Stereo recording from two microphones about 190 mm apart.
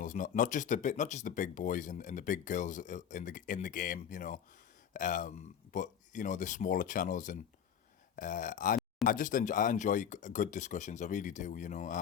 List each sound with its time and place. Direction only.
0.0 s speech: 45° left (ahead or behind)